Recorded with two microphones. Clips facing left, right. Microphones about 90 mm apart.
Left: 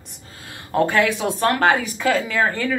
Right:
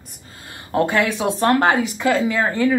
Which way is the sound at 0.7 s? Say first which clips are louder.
Even; 20° right (ahead or behind).